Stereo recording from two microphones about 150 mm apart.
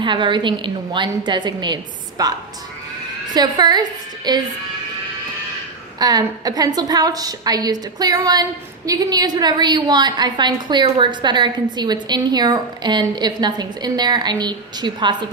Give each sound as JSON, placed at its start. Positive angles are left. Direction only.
{"t": 0.0, "sound": "a woman's voice", "side_deg": -30}
{"t": 3.3, "sound": "a woman's voice", "side_deg": -30}
{"t": 6.0, "sound": "a woman's voice", "side_deg": -25}